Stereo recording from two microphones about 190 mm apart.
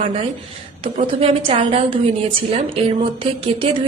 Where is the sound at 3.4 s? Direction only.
30° right (ahead or behind).